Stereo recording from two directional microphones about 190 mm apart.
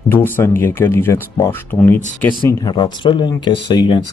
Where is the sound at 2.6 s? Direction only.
25° left (ahead or behind).